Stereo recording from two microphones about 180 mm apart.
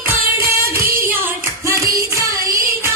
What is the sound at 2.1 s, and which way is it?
Music, 15° right (ahead or behind).